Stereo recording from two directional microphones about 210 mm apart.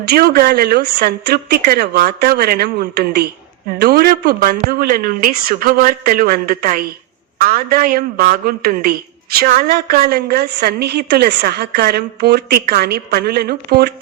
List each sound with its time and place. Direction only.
0.1 s a woman's voice: 45° right (ahead or behind)